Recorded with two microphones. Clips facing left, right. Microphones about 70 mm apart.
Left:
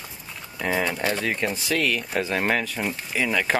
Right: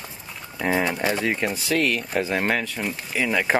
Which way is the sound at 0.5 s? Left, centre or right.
Centre.